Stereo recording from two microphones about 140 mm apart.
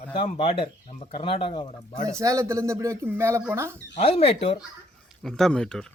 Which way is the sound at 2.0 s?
20° right (ahead or behind).